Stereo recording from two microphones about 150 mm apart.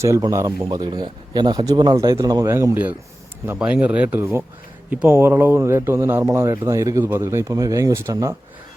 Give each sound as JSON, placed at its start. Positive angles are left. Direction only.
{"t": 0.2, "sound": "speech", "side_deg": -20}
{"t": 0.6, "sound": "speech", "side_deg": -30}
{"t": 3.6, "sound": "speech", "side_deg": -10}